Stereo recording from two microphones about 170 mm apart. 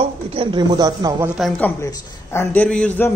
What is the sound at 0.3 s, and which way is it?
Speech, 30° right (ahead or behind).